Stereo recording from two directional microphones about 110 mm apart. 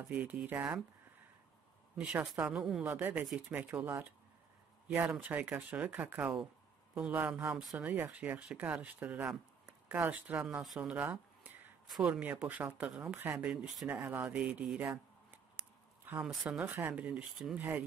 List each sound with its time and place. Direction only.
0.0 s speech: 15° right (ahead or behind)
2.0 s speech: 15° right (ahead or behind)
2.5 s speech: 5° right (ahead or behind)
2.8 s speech: 15° right (ahead or behind)
7.4 s speech: 5° right (ahead or behind)
7.8 s speech: 15° right (ahead or behind)
14.0 s speech: 15° right (ahead or behind)
16.3 s speech: 10° right (ahead or behind)
17.6 s speech: 15° right (ahead or behind)